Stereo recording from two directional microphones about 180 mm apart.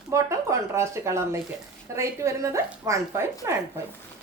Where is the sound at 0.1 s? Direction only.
15° right (ahead or behind).